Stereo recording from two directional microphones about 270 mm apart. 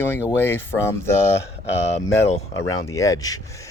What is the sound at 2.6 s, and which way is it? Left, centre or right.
Speech, centre.